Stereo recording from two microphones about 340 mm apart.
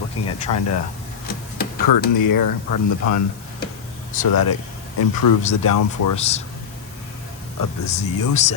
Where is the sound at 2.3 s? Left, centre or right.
Left.